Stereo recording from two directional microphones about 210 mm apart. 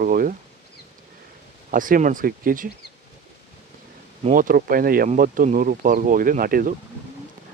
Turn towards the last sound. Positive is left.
turn(degrees=-40)  # may be behind; listen again after turning